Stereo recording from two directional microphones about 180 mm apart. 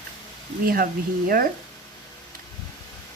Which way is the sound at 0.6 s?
55° right (ahead or behind).